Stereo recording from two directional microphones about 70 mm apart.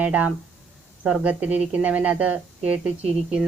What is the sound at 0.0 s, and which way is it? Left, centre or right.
Speech, centre.